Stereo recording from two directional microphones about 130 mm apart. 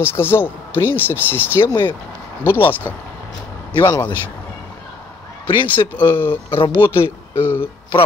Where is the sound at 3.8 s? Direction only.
30° left (ahead or behind).